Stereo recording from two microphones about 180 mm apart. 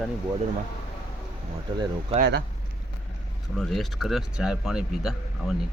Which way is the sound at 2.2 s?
60° right (ahead or behind).